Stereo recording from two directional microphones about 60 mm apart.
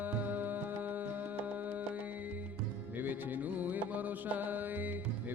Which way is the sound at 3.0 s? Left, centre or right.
Right.